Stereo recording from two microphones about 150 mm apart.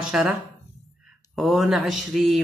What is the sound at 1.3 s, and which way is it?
Speech, centre (ahead or behind).